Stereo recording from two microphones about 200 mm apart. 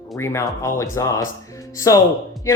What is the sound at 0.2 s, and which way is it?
Speech, 15° left (ahead or behind).